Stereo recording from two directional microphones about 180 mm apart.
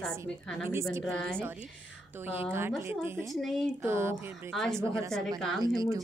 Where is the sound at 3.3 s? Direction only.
Centre (ahead or behind).